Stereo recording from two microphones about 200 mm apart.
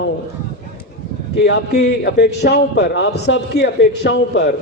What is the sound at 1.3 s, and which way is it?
A man's voice, 60° left (ahead or behind).